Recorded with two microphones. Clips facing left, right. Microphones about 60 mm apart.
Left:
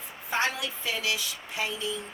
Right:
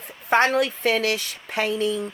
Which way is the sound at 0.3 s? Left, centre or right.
Right.